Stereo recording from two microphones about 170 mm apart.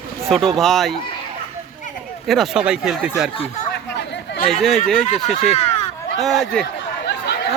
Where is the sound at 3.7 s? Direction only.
90° left.